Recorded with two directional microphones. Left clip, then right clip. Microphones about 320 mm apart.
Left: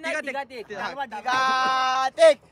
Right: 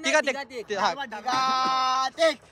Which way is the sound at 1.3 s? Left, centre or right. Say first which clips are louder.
Left 2 dB; left.